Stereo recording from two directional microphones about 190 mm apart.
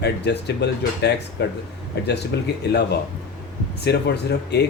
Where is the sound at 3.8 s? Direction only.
60° left (ahead or behind).